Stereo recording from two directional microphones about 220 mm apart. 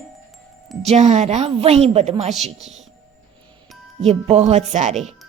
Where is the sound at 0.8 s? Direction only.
30° right (ahead or behind).